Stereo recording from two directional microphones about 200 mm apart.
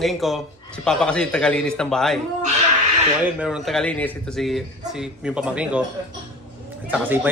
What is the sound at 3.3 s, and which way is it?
A man's voice, 5° right (ahead or behind).